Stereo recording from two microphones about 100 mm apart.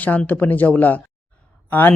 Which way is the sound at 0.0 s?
15° left (ahead or behind).